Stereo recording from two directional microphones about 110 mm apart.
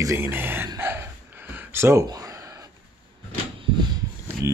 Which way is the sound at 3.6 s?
40° right (ahead or behind).